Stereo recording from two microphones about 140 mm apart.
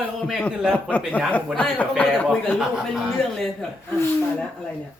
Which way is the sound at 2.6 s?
5° right (ahead or behind).